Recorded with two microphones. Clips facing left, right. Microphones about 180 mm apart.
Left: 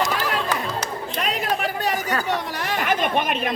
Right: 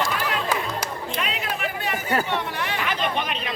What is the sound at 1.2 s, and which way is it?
Speech, 40° left (ahead or behind).